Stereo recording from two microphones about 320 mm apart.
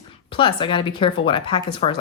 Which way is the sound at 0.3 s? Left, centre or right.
Centre.